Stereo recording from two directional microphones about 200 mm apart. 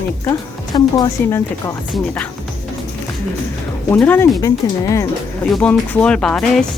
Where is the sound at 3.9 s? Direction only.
10° left (ahead or behind).